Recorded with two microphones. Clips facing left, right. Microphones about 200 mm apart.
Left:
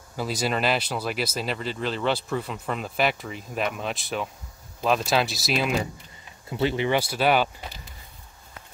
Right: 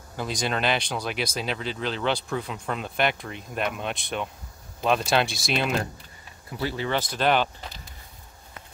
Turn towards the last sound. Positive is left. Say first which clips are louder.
# left 1 dB
turn(degrees=5)  # may be behind; listen again after turning